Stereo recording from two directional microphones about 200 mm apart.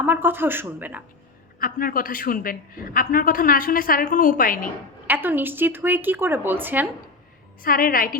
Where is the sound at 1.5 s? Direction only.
45° left (ahead or behind).